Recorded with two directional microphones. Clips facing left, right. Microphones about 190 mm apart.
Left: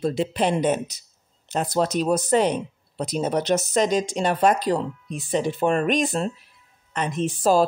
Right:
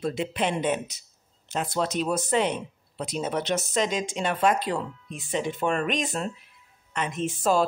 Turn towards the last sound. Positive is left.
turn(degrees=35)  # may be behind; listen again after turning